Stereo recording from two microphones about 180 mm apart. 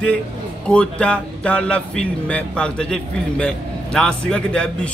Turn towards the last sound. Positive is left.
turn(degrees=5)  # may be behind; listen again after turning